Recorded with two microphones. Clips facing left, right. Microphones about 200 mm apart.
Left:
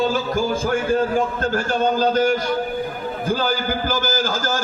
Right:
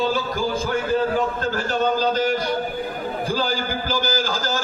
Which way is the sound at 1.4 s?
45° left (ahead or behind).